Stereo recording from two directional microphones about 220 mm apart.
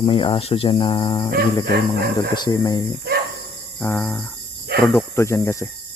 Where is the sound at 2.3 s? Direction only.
20° left (ahead or behind).